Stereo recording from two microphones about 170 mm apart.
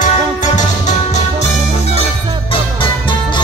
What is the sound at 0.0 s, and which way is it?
Music, 45° left (ahead or behind).